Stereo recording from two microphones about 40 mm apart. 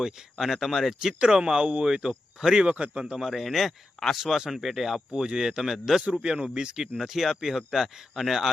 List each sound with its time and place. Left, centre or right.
0.0 s speech: centre
1.2 s a man's voice: centre
3.2 s speech: centre
5.1 s speech: centre
6.2 s speech: centre
7.0 s speech: centre